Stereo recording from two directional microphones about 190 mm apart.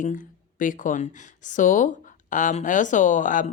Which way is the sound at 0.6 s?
45° left (ahead or behind).